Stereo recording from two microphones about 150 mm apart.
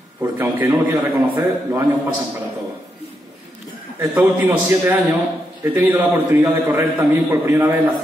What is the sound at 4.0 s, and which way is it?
Speech, 15° right (ahead or behind).